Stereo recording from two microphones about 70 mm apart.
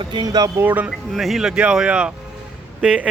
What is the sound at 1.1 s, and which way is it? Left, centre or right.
Speech, centre.